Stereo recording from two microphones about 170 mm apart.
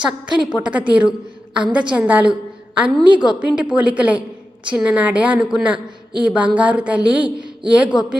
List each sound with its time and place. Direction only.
0.3 s a woman's voice: 5° right (ahead or behind)
7.3 s a sound: 30° right (ahead or behind)
7.8 s a woman's voice: 5° right (ahead or behind)